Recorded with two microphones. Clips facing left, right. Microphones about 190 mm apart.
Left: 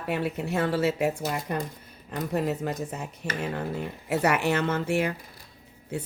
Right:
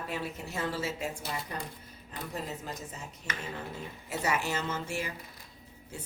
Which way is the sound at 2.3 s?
65° left (ahead or behind).